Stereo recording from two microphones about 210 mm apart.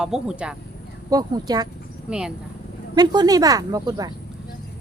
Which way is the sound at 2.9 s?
20° right (ahead or behind).